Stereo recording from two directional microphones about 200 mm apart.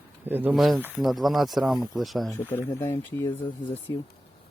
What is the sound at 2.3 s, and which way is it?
Speech, 10° left (ahead or behind).